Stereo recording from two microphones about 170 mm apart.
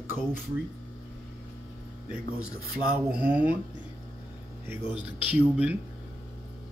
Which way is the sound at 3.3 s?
10° right (ahead or behind).